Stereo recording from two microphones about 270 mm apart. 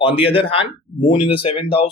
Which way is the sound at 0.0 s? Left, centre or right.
Left.